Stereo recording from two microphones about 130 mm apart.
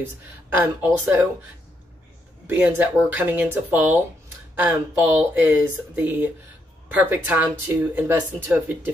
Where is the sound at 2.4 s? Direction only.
15° right (ahead or behind).